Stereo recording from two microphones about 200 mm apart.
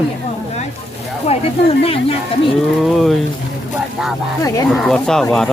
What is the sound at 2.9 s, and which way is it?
Speech, centre (ahead or behind).